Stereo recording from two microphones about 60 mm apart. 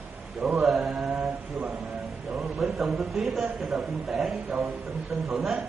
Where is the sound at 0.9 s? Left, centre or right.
Right.